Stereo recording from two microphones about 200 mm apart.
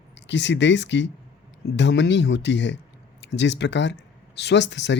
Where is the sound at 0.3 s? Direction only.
60° left (ahead or behind).